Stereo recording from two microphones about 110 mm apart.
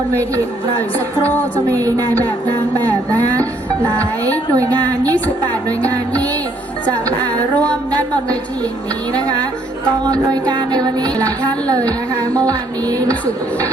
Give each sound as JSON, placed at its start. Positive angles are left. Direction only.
{"t": 1.7, "sound": "speech", "side_deg": -30}
{"t": 4.5, "sound": "speech", "side_deg": -35}
{"t": 9.1, "sound": "speech", "side_deg": -35}